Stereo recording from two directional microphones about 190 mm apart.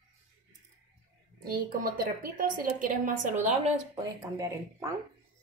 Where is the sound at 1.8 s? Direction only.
50° right (ahead or behind).